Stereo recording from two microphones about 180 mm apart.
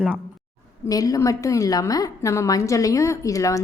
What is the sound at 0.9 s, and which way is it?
A woman's voice, 20° left (ahead or behind).